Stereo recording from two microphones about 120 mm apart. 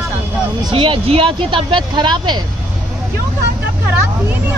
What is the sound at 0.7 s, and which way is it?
Speech, 45° right (ahead or behind).